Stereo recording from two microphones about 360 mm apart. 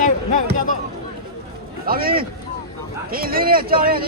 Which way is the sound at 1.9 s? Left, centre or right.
Right.